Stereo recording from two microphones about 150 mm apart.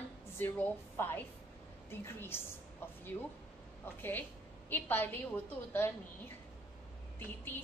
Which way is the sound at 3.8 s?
15° left (ahead or behind).